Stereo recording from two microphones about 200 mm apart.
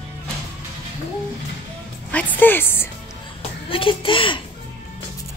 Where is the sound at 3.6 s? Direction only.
25° left (ahead or behind).